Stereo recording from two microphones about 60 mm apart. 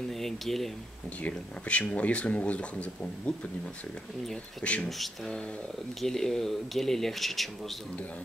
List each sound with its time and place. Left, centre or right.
0.1 s speech: centre
1.2 s speech: left
4.8 s speech: centre